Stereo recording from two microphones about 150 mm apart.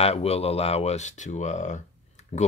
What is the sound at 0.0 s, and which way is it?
Speech, 45° left (ahead or behind).